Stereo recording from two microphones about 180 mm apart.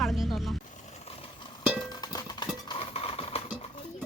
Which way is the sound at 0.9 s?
35° left (ahead or behind).